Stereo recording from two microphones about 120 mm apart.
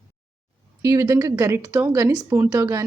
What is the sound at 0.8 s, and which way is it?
A woman's voice, 25° right (ahead or behind).